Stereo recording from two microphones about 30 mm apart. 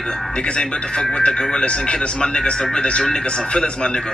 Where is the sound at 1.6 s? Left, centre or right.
Left.